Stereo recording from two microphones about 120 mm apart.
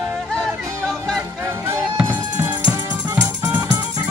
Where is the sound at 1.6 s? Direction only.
20° right (ahead or behind).